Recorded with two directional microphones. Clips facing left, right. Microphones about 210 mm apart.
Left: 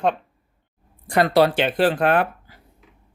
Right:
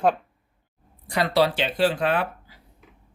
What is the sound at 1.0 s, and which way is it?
Speech, 50° left (ahead or behind).